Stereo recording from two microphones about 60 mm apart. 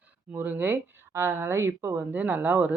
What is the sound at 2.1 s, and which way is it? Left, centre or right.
Speech, right.